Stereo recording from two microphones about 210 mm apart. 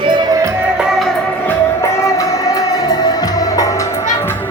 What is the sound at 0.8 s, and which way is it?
Music, centre (ahead or behind).